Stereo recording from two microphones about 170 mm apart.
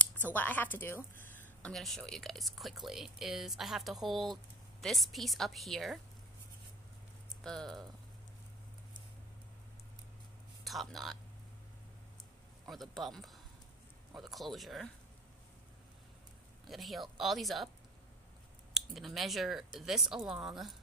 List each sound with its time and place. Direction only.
0.3 s a woman's voice: 10° left (ahead or behind)
7.2 s speech: 5° left (ahead or behind)
10.6 s speech: centre (ahead or behind)
12.6 s a woman's voice: centre (ahead or behind)
16.6 s a woman's voice: centre (ahead or behind)
18.7 s a woman's voice: centre (ahead or behind)